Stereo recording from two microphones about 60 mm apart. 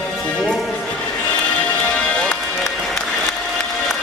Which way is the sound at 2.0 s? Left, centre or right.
Centre.